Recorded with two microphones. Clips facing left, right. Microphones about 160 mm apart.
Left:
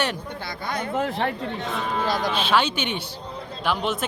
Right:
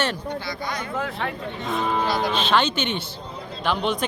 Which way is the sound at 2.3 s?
10° left (ahead or behind).